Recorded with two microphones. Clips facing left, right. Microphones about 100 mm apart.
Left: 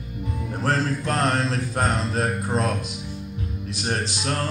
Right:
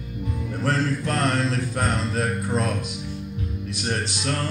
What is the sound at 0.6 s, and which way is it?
Mantra, 35° left (ahead or behind).